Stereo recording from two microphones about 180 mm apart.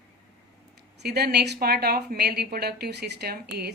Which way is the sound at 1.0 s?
65° right (ahead or behind).